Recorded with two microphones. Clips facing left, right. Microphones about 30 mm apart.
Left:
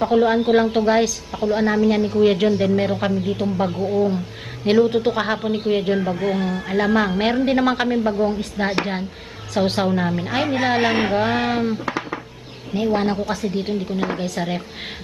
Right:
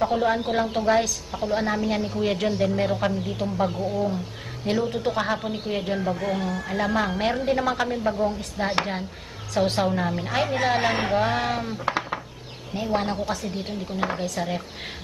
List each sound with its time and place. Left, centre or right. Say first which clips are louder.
0.0 s a woman's voice: left 6 dB; centre
4.6 s a man's voice: left 8 dB; left
8.0 s a woman's voice: left 4 dB; centre
8.6 s a man's voice: left 2 dB; centre
11.8 s speech: left 1 dB; centre
12.7 s a woman's voice: left 5 dB; centre